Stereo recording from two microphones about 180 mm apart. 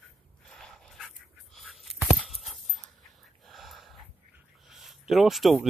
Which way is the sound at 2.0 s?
Centre (ahead or behind).